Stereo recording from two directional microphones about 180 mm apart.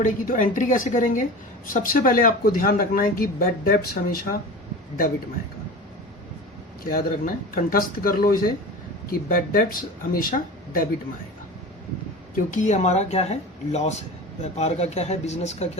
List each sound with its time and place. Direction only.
0.0 s speech: 50° left (ahead or behind)
6.8 s speech: 50° left (ahead or behind)
12.3 s speech: 45° left (ahead or behind)